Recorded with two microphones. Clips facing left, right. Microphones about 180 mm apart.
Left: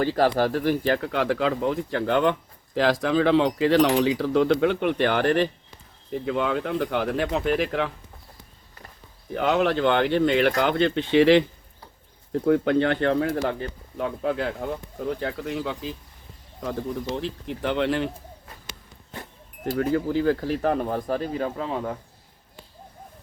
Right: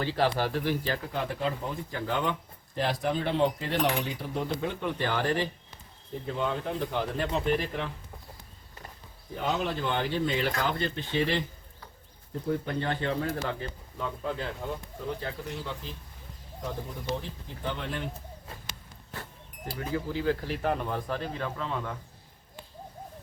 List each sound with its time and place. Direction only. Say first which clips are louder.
0.0 s speech: left 6 dB; 45° left (ahead or behind)
1.0 s speech: left 8 dB; 90° left; by 2.3 s 65° left (ahead or behind)
2.7 s speech: left 8 dB; 90° left; by 5.5 s 65° left (ahead or behind)
6.2 s speech: left 5 dB; 90° left
9.3 s speech: left 8 dB; 80° left; by 14.4 s 65° left (ahead or behind)
15.2 s speech: left 8 dB; 90° left
17.2 s speech: left 10 dB; 85° left
18.7 s a sound: left 3 dB; 15° left (ahead or behind)
19.7 s speech: left 9 dB; 55° left (ahead or behind); by 21.9 s 35° left (ahead or behind)